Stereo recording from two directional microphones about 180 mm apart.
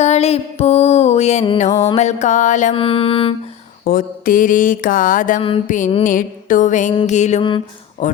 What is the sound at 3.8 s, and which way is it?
Mantra, 50° left (ahead or behind).